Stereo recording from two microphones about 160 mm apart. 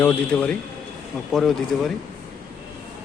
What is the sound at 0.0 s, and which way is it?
A man's voice, 10° left (ahead or behind).